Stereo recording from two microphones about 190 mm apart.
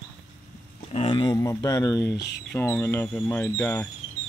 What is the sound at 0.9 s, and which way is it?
Speech, 30° left (ahead or behind).